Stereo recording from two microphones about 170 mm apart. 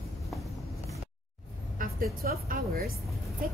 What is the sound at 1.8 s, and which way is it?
A woman's voice, 60° right (ahead or behind).